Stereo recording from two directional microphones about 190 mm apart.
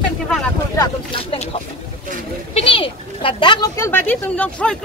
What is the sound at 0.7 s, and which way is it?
Speech, 25° left (ahead or behind).